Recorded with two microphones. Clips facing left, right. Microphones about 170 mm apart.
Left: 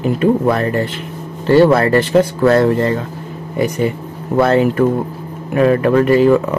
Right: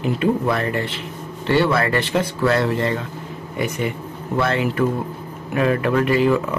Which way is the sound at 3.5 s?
35° left (ahead or behind).